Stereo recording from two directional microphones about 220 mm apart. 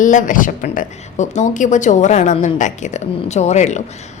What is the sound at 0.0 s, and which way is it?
A woman's voice, 35° left (ahead or behind).